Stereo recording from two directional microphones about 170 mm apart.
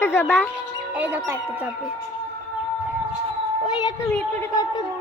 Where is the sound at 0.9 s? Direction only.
10° right (ahead or behind).